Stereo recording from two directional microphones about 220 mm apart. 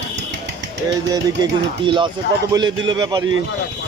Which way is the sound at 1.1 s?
20° right (ahead or behind).